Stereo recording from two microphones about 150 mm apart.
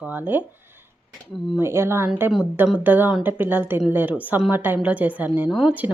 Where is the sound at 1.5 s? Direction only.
15° right (ahead or behind).